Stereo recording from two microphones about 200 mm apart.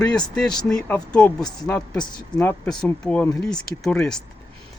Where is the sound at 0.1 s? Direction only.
5° left (ahead or behind).